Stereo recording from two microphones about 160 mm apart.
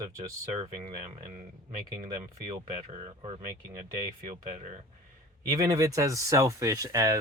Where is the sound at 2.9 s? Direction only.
40° right (ahead or behind).